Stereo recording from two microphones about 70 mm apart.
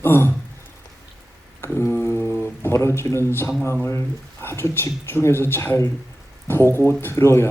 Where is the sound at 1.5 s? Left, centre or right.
Left.